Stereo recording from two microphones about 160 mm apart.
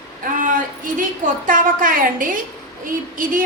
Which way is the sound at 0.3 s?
55° right (ahead or behind).